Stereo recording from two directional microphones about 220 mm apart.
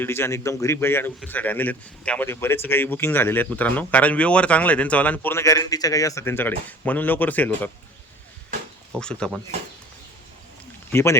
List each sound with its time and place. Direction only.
0.0 s speech: 10° left (ahead or behind)
8.9 s speech: 5° left (ahead or behind)
10.9 s speech: 10° left (ahead or behind)